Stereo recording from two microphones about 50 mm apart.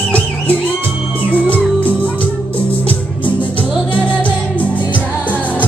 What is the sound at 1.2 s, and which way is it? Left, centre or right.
Music, left.